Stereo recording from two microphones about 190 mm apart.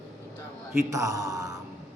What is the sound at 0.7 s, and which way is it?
Speech, 15° right (ahead or behind).